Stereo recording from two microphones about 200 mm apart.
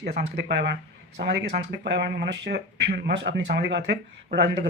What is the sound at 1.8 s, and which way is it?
Speech, 55° right (ahead or behind).